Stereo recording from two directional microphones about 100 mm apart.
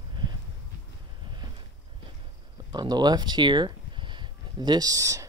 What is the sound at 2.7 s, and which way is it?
Speech, 45° right (ahead or behind).